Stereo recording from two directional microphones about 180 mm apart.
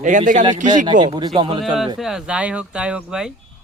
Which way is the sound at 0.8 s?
25° right (ahead or behind).